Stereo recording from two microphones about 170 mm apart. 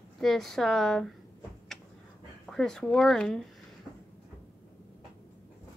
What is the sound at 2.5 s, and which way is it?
Speech, 5° left (ahead or behind).